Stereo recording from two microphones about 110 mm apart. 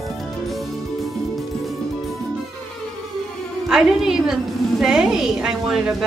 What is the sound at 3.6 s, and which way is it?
A woman's voice, centre (ahead or behind).